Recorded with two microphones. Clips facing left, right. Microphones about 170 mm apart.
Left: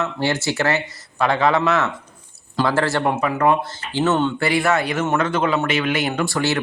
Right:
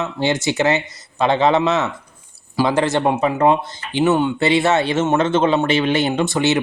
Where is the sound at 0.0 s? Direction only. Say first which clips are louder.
Right 2 dB; 20° right (ahead or behind).